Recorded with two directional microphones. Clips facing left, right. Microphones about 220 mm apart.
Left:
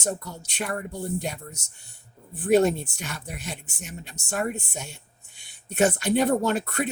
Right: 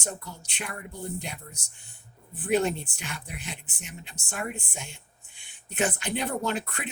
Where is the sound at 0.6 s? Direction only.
45° left (ahead or behind).